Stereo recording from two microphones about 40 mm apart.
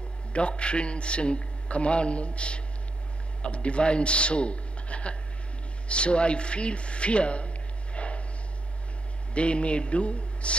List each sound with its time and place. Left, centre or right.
0.3 s a man's voice: left
9.3 s a man's voice: left